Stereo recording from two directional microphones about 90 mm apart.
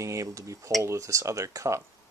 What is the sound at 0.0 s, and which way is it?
Speech, 35° right (ahead or behind).